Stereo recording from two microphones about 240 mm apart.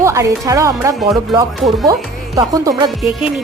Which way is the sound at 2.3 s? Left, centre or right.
Centre.